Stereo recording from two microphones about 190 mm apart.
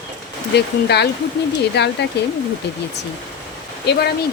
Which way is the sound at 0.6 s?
60° left (ahead or behind).